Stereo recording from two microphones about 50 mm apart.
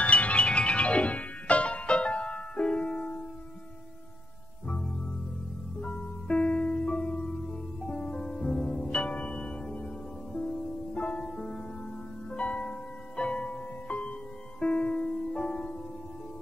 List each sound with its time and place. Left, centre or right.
0.0 s music: left
5.8 s music: left
11.1 s music: centre